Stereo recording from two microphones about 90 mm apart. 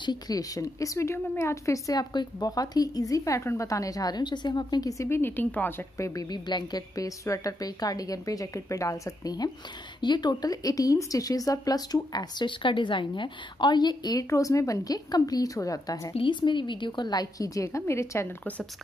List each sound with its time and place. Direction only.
0.0 s a woman's voice: 50° left (ahead or behind)
4.9 s a woman's voice: 30° left (ahead or behind)
9.9 s speech: 55° left (ahead or behind)
14.3 s a woman's voice: 35° left (ahead or behind)
16.2 s speech: 60° left (ahead or behind); by 18.3 s 30° left (ahead or behind)